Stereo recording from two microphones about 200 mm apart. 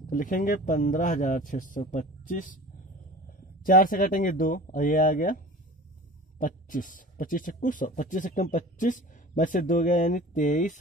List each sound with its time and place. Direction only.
0.0 s speech: 40° left (ahead or behind)